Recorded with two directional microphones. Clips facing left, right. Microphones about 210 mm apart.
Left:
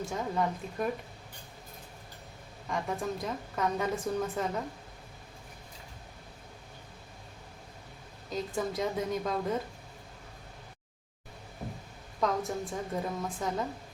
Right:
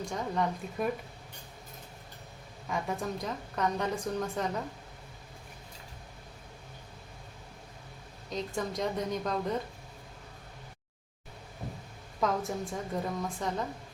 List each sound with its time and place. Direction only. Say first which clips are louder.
0.0 s a woman's voice: even; 5° left (ahead or behind)
2.6 s a woman's voice: even; centre (ahead or behind)
8.3 s a woman's voice: left 1 dB; 5° left (ahead or behind)
12.2 s a woman's voice: even; centre (ahead or behind)